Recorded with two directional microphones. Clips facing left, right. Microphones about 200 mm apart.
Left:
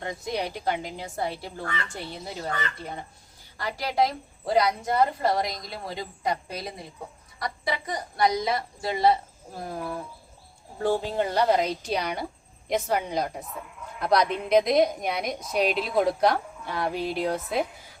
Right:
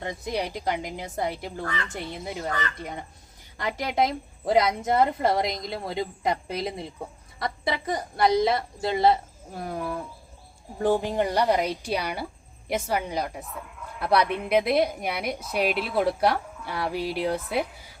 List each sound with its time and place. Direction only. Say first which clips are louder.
0.3 s a woman's voice: right 1 dB; 10° right (ahead or behind)
10.8 s a woman's voice: right 2 dB; 15° right (ahead or behind)